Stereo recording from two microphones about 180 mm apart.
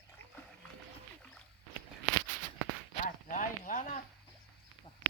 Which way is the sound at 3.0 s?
45° left (ahead or behind).